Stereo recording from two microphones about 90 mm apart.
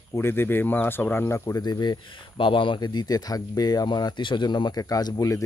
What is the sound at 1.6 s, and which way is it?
Speech, 50° left (ahead or behind).